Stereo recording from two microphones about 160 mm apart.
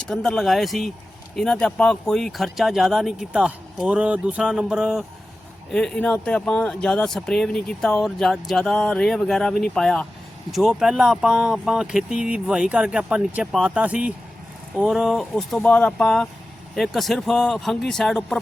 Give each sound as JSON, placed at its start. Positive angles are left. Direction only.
{"t": 0.0, "sound": "speech", "side_deg": 5}